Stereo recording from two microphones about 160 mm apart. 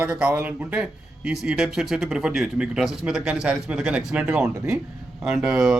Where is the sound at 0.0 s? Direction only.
5° right (ahead or behind).